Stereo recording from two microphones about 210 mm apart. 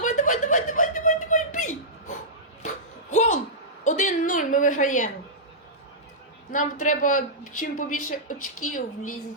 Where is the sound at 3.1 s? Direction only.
35° left (ahead or behind).